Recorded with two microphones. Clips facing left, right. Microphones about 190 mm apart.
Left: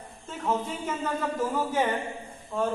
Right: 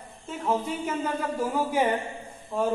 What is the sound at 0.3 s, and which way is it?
A man's voice, 10° right (ahead or behind).